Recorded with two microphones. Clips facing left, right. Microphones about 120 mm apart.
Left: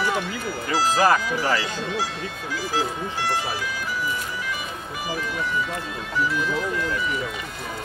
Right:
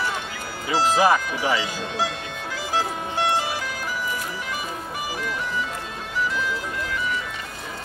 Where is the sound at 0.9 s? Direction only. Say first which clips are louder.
Even; 10° right (ahead or behind).